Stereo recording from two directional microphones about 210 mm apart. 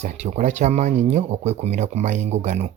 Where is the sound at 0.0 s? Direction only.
35° right (ahead or behind).